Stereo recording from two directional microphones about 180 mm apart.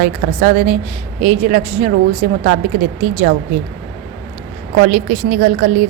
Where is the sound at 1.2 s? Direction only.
35° right (ahead or behind).